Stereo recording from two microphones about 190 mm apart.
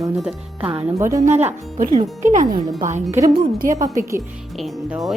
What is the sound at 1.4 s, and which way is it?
Music, 35° right (ahead or behind).